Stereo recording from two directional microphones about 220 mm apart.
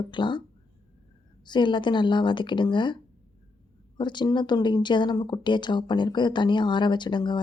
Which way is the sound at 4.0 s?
20° left (ahead or behind).